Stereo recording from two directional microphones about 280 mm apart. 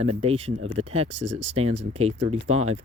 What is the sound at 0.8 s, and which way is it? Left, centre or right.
Speech, right.